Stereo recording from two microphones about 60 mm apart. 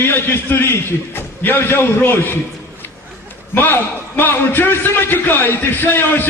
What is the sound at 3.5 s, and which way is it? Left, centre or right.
A man's voice, left.